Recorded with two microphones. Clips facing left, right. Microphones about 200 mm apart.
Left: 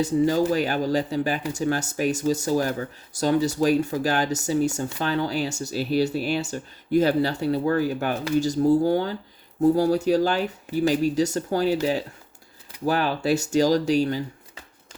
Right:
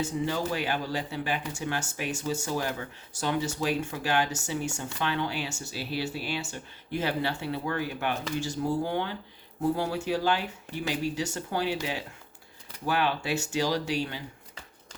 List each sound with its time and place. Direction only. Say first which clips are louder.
0.0 s speech: left 9 dB; 40° left (ahead or behind)